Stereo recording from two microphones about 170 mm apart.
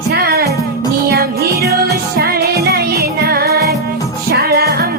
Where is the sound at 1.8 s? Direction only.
65° right (ahead or behind).